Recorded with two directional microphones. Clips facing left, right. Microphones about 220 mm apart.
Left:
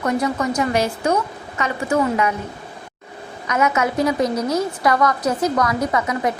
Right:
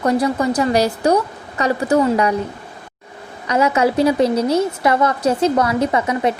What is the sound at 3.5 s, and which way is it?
A woman's voice, 30° right (ahead or behind).